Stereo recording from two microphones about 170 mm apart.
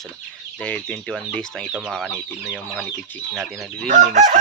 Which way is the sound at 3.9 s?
50° right (ahead or behind).